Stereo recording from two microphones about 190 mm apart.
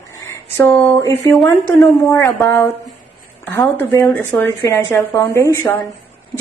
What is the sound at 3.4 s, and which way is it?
A woman's voice, 10° left (ahead or behind).